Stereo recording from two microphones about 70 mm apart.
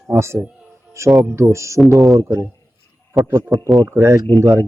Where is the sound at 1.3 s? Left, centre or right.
Right.